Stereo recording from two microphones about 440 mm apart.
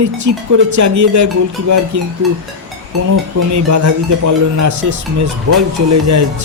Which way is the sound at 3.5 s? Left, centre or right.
Right.